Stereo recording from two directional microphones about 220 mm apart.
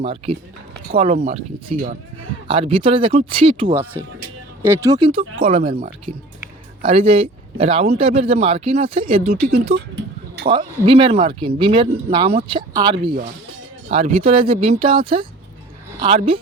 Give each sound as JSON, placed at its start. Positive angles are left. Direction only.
{"t": 0.0, "sound": "speech", "side_deg": -25}
{"t": 4.6, "sound": "speech", "side_deg": -15}
{"t": 6.8, "sound": "speech", "side_deg": -25}